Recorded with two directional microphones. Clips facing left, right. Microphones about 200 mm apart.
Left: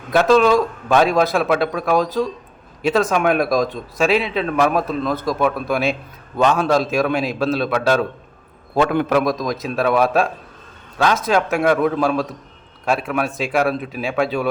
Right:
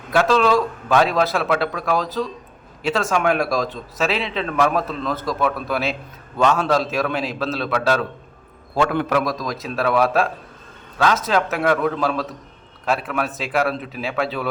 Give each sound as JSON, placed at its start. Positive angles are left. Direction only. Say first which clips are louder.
{"t": 0.1, "sound": "speech", "louder": "left 3 dB", "side_deg": 15}